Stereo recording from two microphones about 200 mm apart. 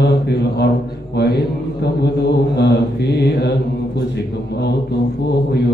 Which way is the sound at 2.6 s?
55° left (ahead or behind).